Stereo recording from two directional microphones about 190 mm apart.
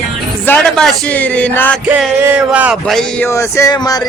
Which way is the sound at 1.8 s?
5° right (ahead or behind).